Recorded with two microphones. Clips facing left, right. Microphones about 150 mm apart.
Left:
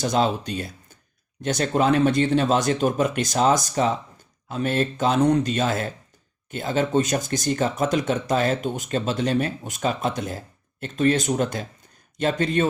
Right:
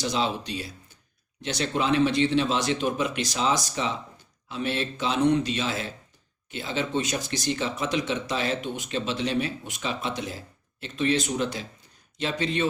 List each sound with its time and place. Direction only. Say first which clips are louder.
0.0 s speech: left 5 dB; 50° left (ahead or behind)